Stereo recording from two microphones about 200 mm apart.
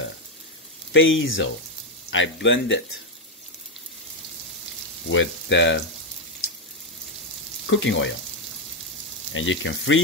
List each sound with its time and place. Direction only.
0.9 s speech: 70° left (ahead or behind)
5.0 s frying: 70° left (ahead or behind)
7.7 s speech: 70° left (ahead or behind)
9.3 s speech: 70° left (ahead or behind)